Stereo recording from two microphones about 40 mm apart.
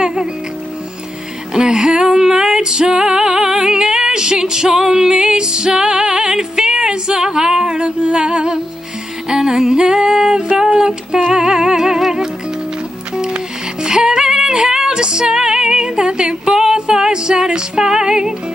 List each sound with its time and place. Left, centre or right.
0.0 s music: centre
1.5 s female singing: centre
9.3 s music: centre
13.8 s female singing: centre